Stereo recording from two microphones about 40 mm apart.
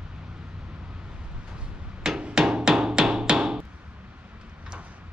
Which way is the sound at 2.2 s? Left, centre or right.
Right.